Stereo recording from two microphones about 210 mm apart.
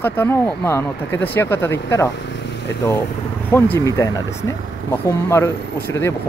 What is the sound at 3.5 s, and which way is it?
Speech, 10° left (ahead or behind).